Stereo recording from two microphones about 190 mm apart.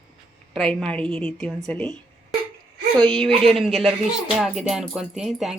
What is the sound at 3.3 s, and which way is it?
Speech, 30° right (ahead or behind).